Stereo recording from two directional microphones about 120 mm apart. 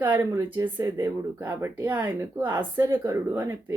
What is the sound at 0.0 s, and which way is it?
Speech, 15° right (ahead or behind).